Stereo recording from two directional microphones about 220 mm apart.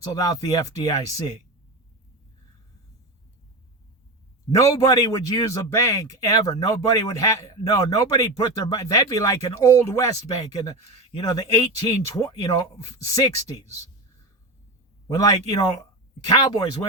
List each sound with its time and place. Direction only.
0.0 s speech: 15° left (ahead or behind)
4.5 s speech: 15° left (ahead or behind)
15.1 s speech: 15° left (ahead or behind)